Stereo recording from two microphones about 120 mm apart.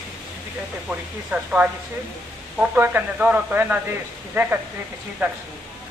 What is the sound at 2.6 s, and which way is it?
A woman's voice, 15° right (ahead or behind).